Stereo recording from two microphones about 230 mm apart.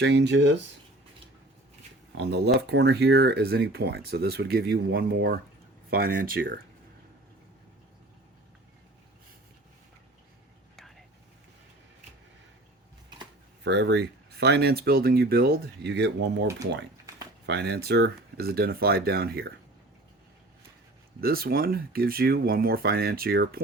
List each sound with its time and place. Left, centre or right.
0.0 s speech: right
2.1 s speech: right
13.7 s speech: right
21.2 s speech: right